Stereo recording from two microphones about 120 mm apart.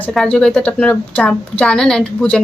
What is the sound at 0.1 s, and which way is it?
A woman's voice, 5° left (ahead or behind).